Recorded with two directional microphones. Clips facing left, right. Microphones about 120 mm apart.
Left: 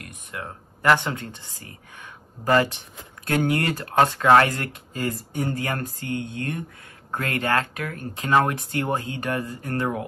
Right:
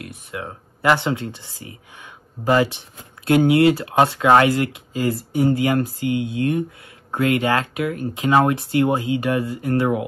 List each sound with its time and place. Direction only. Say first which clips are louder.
0.1 s speech: right 4 dB; 15° right (ahead or behind)
2.4 s speech: right 2 dB; 15° right (ahead or behind)